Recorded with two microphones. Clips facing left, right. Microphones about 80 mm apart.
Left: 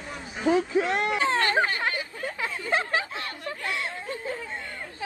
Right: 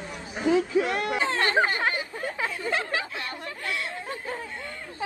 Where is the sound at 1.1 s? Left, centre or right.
Right.